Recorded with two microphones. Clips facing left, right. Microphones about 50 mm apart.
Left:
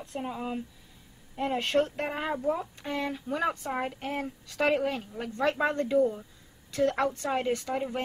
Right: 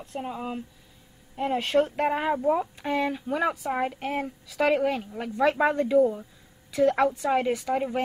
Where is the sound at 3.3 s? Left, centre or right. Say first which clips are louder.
Right 2 dB; centre.